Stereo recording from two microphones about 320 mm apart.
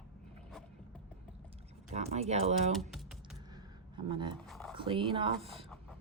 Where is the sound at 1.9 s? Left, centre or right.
Centre.